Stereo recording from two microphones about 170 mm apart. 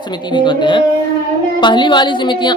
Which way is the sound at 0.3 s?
30° left (ahead or behind).